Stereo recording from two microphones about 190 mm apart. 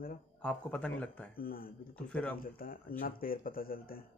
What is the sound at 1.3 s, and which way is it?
Speech, 50° left (ahead or behind).